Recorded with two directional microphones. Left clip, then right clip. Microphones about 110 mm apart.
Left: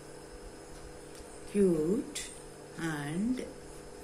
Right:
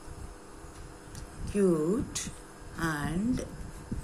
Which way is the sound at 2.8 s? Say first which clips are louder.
Right 4 dB; 40° right (ahead or behind).